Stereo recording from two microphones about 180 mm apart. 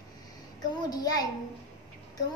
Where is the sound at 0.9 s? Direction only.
20° left (ahead or behind).